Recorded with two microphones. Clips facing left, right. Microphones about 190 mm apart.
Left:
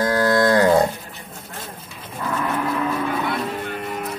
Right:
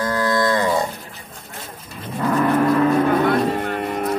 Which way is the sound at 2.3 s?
50° right (ahead or behind).